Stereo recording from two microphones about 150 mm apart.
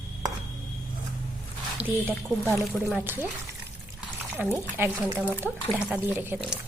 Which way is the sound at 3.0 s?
15° right (ahead or behind).